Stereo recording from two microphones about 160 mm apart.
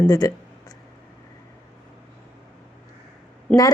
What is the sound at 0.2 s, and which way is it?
Speech, 20° left (ahead or behind).